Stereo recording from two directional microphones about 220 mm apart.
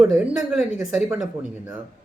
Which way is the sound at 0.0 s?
5° right (ahead or behind).